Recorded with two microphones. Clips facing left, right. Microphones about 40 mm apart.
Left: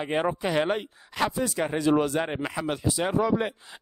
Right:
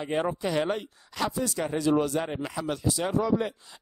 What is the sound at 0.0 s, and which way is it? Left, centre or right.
A man's voice, left.